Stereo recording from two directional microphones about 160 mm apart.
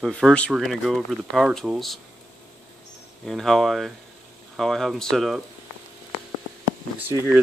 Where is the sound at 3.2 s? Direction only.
Centre (ahead or behind).